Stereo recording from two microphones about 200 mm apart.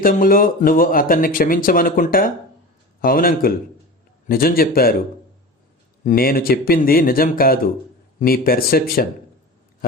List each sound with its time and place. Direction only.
0.0 s speech: 45° left (ahead or behind)
6.1 s speech: 50° left (ahead or behind)